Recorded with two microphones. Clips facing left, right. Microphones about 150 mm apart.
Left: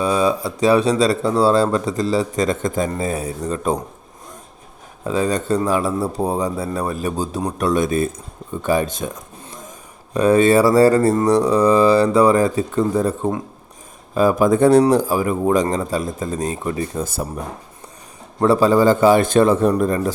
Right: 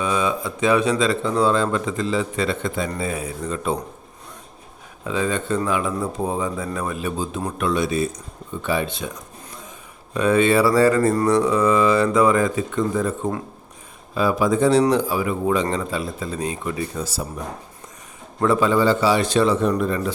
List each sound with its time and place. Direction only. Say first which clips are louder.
0.0 s speech: left 4 dB; 35° left (ahead or behind)
5.0 s a man's voice: left 4 dB; 40° left (ahead or behind)
8.6 s a sound: left 5 dB; 40° left (ahead or behind)
10.2 s a man's voice: left 4 dB; 40° left (ahead or behind)
14.8 s a man's voice: left 4 dB; 40° left (ahead or behind)
18.3 s a man's voice: left 4 dB; 35° left (ahead or behind)